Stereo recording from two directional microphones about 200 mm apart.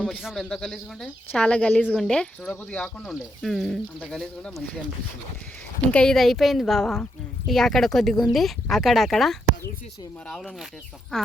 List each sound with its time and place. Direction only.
0.0 s speech: centre (ahead or behind)
5.9 s speech: 5° left (ahead or behind)